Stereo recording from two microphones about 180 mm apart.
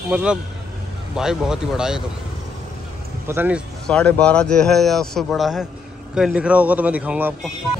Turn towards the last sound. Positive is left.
turn(degrees=-10)  # may be behind; listen again after turning